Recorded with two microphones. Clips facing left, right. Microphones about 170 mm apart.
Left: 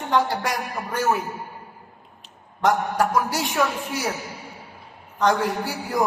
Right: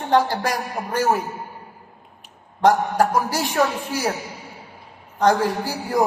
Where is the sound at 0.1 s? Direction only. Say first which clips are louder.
Right 3 dB; 30° right (ahead or behind).